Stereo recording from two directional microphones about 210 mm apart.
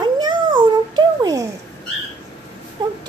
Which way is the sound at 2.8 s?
20° right (ahead or behind).